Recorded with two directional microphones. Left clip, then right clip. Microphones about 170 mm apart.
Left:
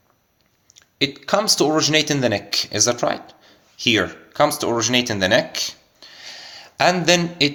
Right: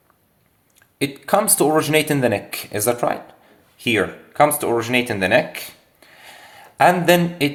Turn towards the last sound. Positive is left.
turn(degrees=20)  # may be behind; listen again after turning